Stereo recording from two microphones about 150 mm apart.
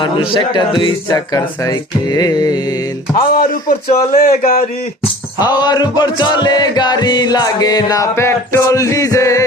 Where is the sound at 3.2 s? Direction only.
70° left (ahead or behind).